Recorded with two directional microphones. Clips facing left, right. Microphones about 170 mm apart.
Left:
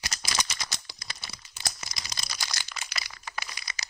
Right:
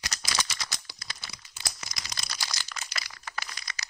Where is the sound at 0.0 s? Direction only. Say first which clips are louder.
Even; 20° left (ahead or behind).